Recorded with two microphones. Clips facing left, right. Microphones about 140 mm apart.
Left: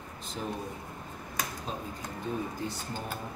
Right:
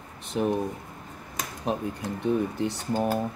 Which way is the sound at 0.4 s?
80° right.